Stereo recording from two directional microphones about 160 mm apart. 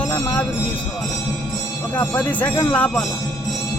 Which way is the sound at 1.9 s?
10° left (ahead or behind).